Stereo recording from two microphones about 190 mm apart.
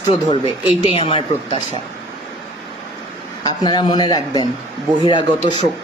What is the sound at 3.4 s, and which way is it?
A man's voice, 25° left (ahead or behind).